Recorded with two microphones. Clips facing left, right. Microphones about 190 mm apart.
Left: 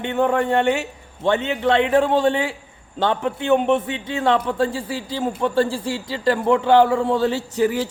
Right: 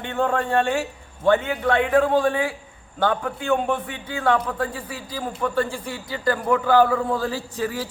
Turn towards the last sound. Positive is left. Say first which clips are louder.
# left 7 dB
turn(degrees=25)  # may be behind; listen again after turning